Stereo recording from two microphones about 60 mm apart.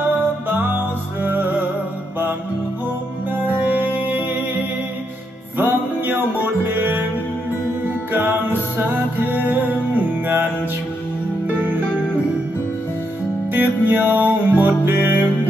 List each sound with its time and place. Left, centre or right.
1.2 s music: right
3.4 s music: right
5.6 s music: right
8.1 s music: right
13.5 s music: right